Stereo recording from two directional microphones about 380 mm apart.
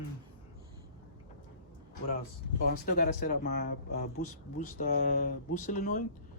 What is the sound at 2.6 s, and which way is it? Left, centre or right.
Speech, left.